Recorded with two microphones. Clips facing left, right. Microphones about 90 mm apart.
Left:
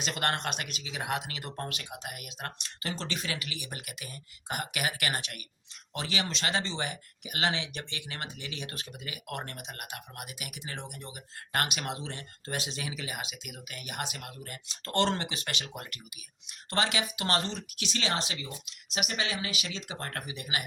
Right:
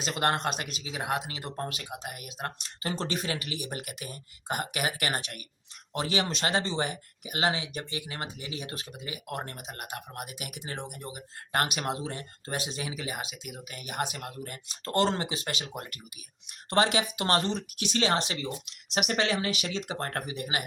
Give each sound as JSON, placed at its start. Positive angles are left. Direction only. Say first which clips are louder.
{"t": 0.0, "sound": "speech", "louder": "right 4 dB", "side_deg": -30}
{"t": 17.5, "sound": "speech", "louder": "right 6 dB", "side_deg": -50}